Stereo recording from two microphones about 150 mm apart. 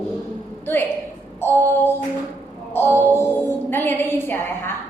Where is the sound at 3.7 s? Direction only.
15° left (ahead or behind).